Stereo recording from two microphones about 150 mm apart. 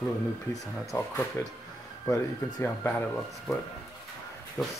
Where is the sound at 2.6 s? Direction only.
15° left (ahead or behind).